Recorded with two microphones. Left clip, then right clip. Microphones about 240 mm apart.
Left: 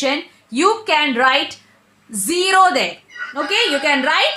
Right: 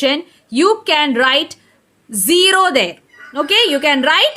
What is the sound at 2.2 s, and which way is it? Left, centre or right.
Speech, right.